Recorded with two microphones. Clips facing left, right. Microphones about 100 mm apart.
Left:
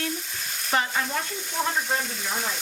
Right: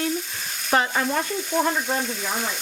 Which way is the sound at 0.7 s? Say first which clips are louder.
Right 4 dB; 50° right (ahead or behind).